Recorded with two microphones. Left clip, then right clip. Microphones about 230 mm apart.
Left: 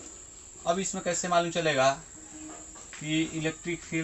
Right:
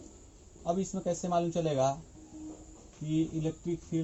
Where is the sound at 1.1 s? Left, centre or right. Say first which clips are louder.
Left 5 dB; left.